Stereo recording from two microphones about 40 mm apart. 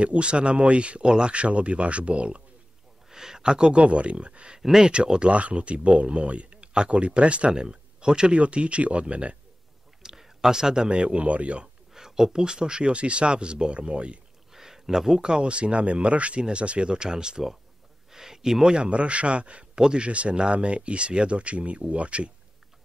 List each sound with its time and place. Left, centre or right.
0.0 s speech: right
1.3 s speech: right
3.1 s a sound: centre
3.8 s speech: right
4.6 s speech: centre
4.9 s speech: right
10.0 s a man's voice: centre; by 11.7 s right
11.9 s speech: centre; by 14.2 s right
14.5 s a sound: centre
15.2 s speech: right
18.8 s speech: right